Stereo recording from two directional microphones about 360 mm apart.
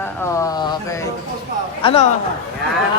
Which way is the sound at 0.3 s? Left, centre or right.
Centre.